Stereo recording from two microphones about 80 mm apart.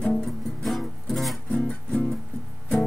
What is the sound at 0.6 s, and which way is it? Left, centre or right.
Music, centre.